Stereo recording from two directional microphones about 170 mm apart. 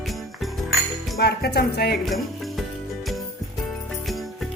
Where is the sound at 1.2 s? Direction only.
70° left (ahead or behind).